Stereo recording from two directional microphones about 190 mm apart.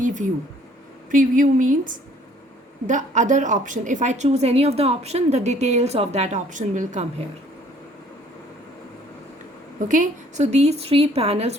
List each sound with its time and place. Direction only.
0.0 s a woman's voice: 40° right (ahead or behind)
9.9 s a woman's voice: 40° right (ahead or behind)